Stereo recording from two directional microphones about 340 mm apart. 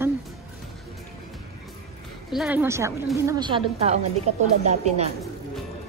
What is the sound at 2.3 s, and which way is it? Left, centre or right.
A woman's voice, centre.